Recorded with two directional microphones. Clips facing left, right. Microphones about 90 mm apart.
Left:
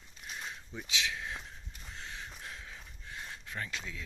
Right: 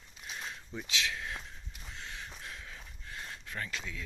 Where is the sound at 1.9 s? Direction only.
30° left (ahead or behind).